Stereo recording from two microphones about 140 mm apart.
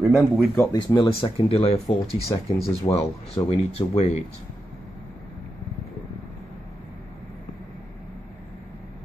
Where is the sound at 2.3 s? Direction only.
30° left (ahead or behind).